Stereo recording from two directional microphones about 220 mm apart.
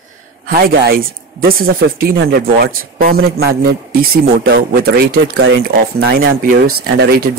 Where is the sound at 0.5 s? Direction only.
40° right (ahead or behind).